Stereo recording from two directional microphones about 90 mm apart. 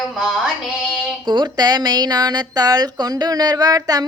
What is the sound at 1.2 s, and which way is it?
Speech, 60° right (ahead or behind).